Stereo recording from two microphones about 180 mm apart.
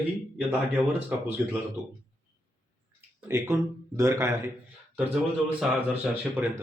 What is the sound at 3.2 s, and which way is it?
Speech, 15° right (ahead or behind).